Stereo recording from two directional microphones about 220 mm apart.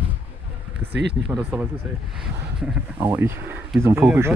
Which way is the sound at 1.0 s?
50° right (ahead or behind).